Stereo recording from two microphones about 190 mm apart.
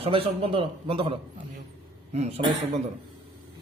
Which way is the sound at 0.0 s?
30° right (ahead or behind).